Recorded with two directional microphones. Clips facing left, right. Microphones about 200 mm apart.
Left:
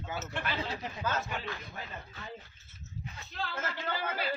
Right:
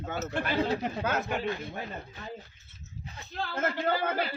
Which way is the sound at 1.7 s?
40° right (ahead or behind).